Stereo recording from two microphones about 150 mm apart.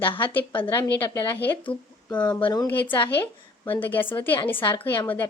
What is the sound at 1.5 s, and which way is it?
Speech, 10° left (ahead or behind).